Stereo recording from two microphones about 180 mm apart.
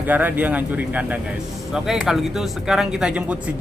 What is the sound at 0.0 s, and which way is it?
A man's voice, 10° right (ahead or behind).